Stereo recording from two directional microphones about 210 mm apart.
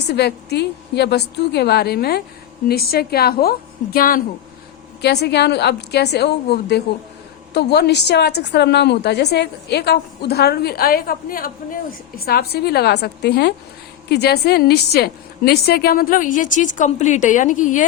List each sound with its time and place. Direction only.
0.1 s a woman's voice: 50° left (ahead or behind)